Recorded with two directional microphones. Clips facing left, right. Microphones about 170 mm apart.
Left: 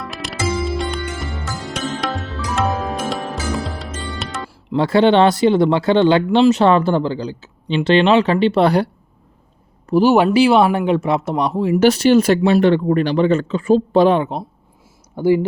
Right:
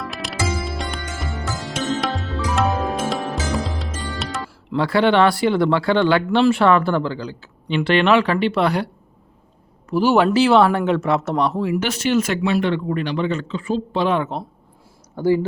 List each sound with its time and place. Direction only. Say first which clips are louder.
0.0 s music: left 2 dB; centre (ahead or behind)
4.7 s speech: left 4 dB; 20° left (ahead or behind)
10.0 s speech: left 3 dB; 15° left (ahead or behind)
11.7 s speech: left 7 dB; 35° left (ahead or behind)
14.2 s speech: left 3 dB; 15° left (ahead or behind)